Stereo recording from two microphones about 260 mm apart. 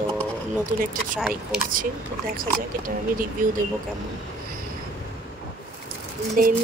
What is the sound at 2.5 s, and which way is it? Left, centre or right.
Speech, right.